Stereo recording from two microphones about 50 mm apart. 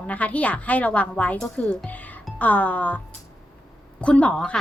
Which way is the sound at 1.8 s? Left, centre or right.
Left.